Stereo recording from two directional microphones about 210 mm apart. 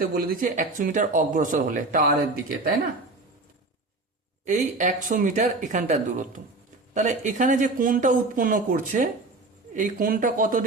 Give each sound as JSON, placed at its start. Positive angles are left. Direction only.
{"t": 0.0, "sound": "speech", "side_deg": -40}
{"t": 4.4, "sound": "speech", "side_deg": -35}